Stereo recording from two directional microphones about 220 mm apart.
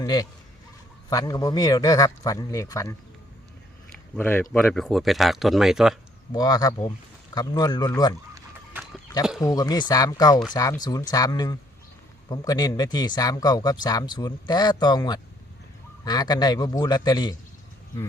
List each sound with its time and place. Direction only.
0.0 s speech: 15° left (ahead or behind)
4.1 s speech: 10° left (ahead or behind)
6.3 s speech: 15° left (ahead or behind)
9.4 s speech: 15° left (ahead or behind)